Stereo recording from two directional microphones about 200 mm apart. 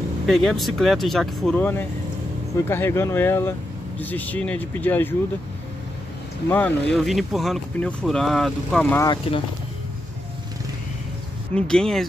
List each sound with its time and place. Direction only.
0.3 s speech: centre (ahead or behind)
6.5 s speech: 5° left (ahead or behind)
9.0 s speech: 20° left (ahead or behind)
11.5 s speech: 5° left (ahead or behind)